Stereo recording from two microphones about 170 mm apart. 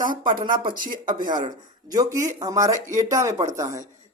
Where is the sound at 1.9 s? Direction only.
20° right (ahead or behind).